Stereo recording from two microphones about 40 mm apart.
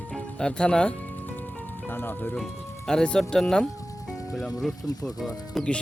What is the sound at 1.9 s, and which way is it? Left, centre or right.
Speech, left.